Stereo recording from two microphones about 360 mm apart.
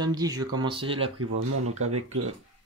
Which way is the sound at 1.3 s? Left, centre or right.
Right.